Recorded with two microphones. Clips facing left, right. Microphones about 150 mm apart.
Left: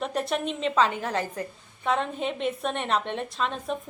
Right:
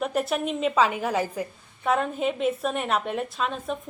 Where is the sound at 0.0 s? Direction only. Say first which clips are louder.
Right 2 dB; 5° right (ahead or behind).